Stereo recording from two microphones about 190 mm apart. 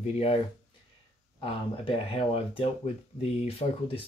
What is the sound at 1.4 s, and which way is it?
Speech, 30° left (ahead or behind).